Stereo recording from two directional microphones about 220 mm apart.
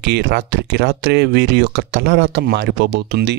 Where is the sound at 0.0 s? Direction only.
50° right (ahead or behind).